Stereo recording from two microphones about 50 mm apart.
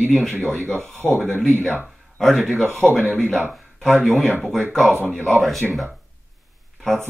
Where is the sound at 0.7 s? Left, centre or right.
Centre.